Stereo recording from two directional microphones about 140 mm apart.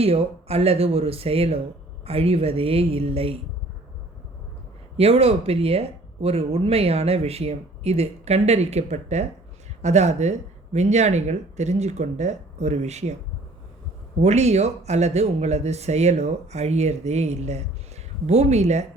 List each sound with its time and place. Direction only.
0.0 s speech: 45° right (ahead or behind)
4.9 s speech: 45° right (ahead or behind)
14.2 s speech: 50° right (ahead or behind)